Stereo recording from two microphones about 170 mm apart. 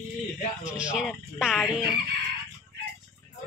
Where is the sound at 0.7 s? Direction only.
5° right (ahead or behind).